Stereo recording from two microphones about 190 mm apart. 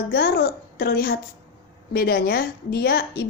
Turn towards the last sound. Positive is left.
turn(degrees=60)  # may be behind; listen again after turning